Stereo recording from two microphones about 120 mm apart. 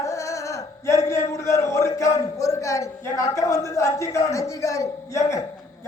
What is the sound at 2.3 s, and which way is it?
A man's voice, 25° left (ahead or behind).